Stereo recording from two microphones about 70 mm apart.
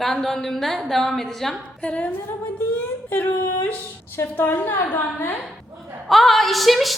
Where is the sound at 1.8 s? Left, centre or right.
Centre.